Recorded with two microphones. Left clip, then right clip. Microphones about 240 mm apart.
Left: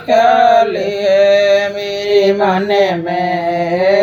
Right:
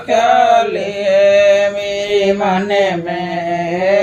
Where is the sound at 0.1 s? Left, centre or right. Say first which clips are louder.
Left 1 dB; left.